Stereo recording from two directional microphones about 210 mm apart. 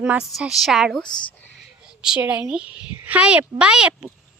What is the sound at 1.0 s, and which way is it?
Speech, 20° left (ahead or behind).